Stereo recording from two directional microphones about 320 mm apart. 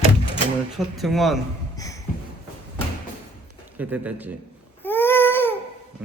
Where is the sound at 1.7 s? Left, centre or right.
Centre.